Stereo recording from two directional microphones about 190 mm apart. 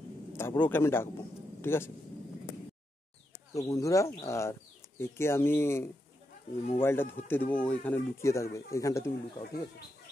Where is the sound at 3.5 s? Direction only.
15° left (ahead or behind).